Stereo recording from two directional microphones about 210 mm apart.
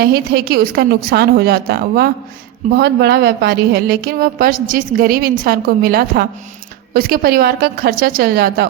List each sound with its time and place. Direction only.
0.0 s a woman's voice: 45° right (ahead or behind)